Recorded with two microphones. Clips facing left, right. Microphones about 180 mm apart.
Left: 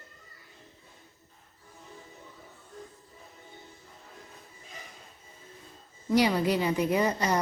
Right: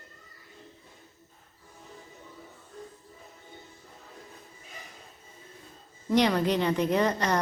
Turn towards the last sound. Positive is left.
turn(degrees=10)  # may be behind; listen again after turning